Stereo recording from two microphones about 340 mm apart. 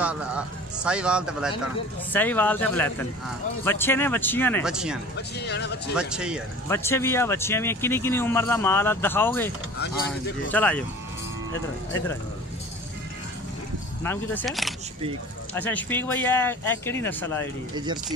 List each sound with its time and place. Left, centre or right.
0.0 s speech: centre
5.1 s speech: left
5.9 s speech: centre
10.5 s speech: centre
14.0 s speech: centre